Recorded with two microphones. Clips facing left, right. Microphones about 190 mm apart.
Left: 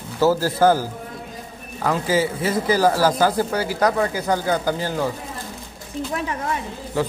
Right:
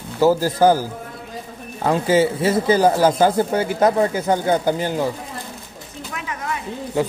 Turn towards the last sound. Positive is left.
turn(degrees=-20)  # may be behind; listen again after turning